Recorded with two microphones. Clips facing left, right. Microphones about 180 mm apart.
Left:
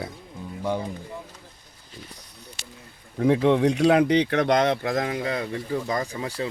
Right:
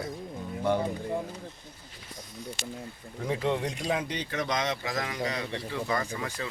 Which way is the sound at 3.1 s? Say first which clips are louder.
Left 10 dB; 65° left (ahead or behind).